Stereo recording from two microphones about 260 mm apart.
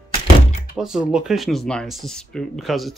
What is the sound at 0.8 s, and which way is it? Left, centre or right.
Speech, centre.